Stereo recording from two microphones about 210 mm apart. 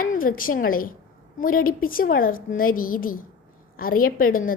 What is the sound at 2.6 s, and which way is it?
Child singing, 40° left (ahead or behind).